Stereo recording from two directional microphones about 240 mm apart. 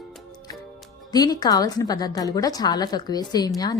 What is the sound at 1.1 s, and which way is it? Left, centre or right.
A woman's voice, centre.